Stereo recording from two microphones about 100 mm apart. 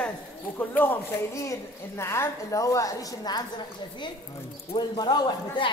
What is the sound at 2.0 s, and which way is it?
Speech, 25° left (ahead or behind).